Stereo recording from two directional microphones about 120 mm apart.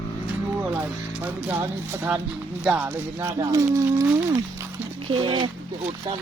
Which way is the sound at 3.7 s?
25° right (ahead or behind).